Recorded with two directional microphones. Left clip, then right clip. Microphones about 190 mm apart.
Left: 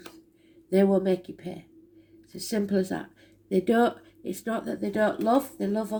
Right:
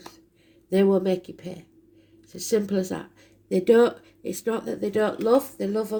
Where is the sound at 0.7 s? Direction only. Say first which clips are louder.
Right 2 dB; 35° right (ahead or behind).